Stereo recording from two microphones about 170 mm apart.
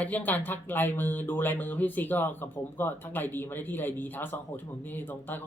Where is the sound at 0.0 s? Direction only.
10° left (ahead or behind).